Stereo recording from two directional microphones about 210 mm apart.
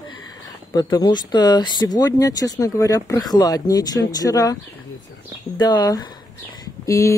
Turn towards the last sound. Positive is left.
turn(degrees=15)  # may be behind; listen again after turning